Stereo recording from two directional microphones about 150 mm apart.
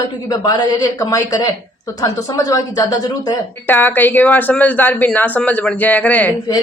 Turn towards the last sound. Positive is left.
turn(degrees=10)  # may be behind; listen again after turning